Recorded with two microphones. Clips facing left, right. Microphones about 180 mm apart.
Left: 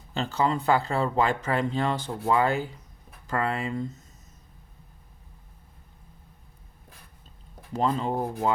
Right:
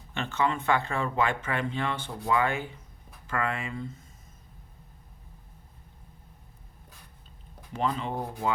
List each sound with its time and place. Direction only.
0.1 s speech: 35° left (ahead or behind)
7.7 s speech: 40° left (ahead or behind)